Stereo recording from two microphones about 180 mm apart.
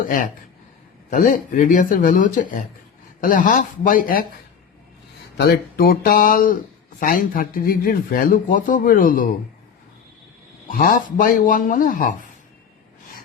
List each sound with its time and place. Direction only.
1.1 s speech: 45° left (ahead or behind)
5.4 s speech: 60° left (ahead or behind)
10.7 s speech: 50° left (ahead or behind)